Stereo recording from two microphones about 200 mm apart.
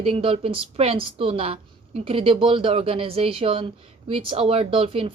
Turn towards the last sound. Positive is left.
turn(degrees=-30)  # may be behind; listen again after turning